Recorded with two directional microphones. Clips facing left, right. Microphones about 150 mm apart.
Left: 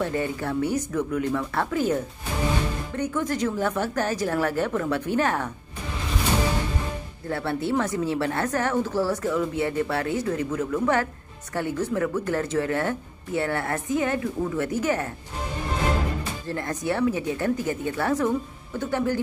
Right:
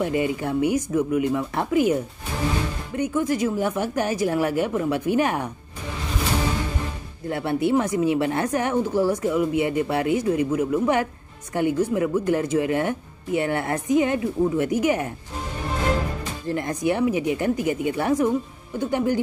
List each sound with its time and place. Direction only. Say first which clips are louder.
0.0 s speech: right 3 dB; 15° right (ahead or behind)
3.0 s speech: right 4 dB; 10° right (ahead or behind)
7.2 s speech: right 4 dB; 15° right (ahead or behind)
16.4 s speech: right 5 dB; 15° right (ahead or behind)